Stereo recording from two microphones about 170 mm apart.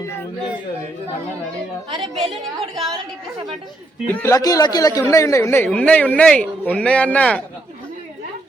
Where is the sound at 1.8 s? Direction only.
30° right (ahead or behind).